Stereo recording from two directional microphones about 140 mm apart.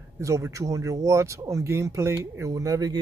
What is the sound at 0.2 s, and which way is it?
Speech, 20° right (ahead or behind).